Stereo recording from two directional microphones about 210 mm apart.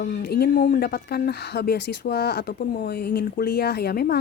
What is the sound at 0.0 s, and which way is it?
Speech, 50° left (ahead or behind).